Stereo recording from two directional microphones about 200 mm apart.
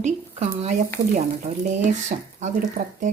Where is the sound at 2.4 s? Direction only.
40° right (ahead or behind).